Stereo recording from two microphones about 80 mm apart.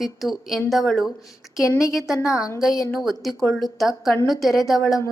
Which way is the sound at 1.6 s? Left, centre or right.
Left.